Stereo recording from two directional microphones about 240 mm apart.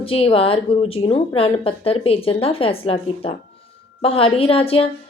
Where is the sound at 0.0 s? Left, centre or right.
Left.